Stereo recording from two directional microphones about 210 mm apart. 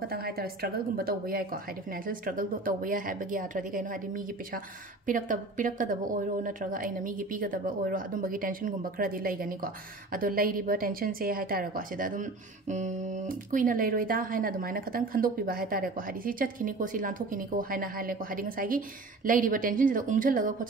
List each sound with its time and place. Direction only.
0.1 s a woman's voice: 45° right (ahead or behind)